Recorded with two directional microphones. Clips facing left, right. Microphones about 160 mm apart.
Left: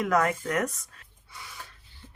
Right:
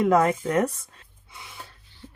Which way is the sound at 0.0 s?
25° right (ahead or behind).